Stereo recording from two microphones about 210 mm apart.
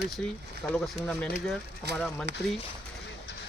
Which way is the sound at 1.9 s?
55° right (ahead or behind).